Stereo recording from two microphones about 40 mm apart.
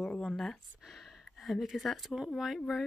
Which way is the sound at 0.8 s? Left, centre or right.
Centre.